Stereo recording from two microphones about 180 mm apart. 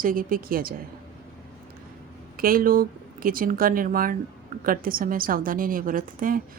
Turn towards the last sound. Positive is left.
turn(degrees=-50)  # may be behind; listen again after turning